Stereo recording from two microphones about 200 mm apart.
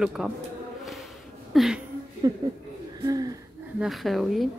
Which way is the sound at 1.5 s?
Centre (ahead or behind).